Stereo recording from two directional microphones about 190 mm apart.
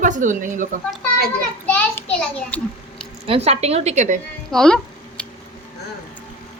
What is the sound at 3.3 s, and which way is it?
Speech, 35° right (ahead or behind).